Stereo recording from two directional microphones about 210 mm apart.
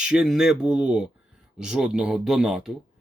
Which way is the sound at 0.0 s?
5° right (ahead or behind).